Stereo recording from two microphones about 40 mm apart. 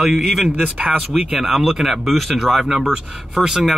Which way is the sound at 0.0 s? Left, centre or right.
Centre.